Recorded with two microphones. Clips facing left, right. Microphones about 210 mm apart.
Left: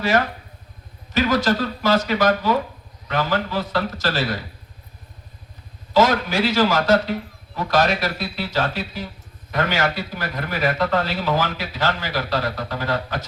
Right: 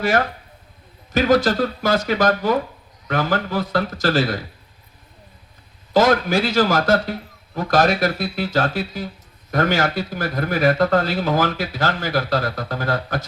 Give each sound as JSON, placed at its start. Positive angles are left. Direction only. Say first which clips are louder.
{"t": 1.1, "sound": "a man's voice", "louder": "right 3 dB", "side_deg": -50}
{"t": 5.9, "sound": "a man's voice", "louder": "right 2 dB", "side_deg": -50}